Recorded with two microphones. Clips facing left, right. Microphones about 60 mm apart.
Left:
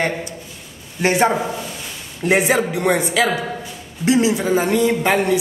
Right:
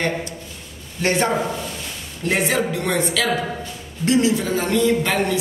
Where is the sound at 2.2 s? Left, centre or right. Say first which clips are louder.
Left 4 dB; centre.